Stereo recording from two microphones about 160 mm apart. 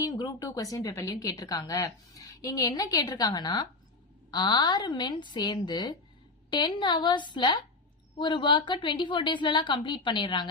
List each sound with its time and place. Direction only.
0.0 s speech: 25° left (ahead or behind)